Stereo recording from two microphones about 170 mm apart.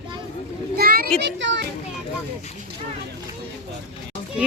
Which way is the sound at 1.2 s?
90° right.